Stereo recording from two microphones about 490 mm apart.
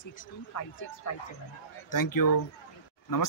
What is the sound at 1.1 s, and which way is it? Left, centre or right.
Speech, left.